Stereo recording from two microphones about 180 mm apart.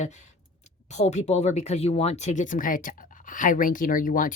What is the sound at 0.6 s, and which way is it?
A woman's voice, 40° left (ahead or behind).